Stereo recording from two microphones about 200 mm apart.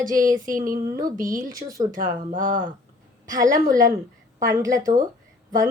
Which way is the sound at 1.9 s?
45° right (ahead or behind).